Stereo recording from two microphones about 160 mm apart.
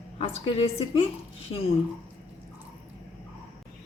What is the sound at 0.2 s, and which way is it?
Speech, 35° left (ahead or behind).